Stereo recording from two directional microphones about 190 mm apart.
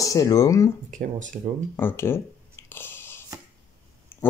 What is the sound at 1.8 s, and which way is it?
Speech, 10° left (ahead or behind).